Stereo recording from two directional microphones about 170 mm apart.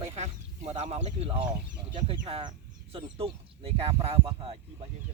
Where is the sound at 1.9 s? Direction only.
30° right (ahead or behind).